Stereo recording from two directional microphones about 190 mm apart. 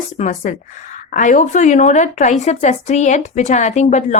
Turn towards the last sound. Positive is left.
turn(degrees=35)  # may be behind; listen again after turning